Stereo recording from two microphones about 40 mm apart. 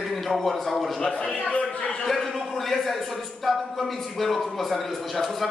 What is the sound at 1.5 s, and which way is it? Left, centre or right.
Speech, left.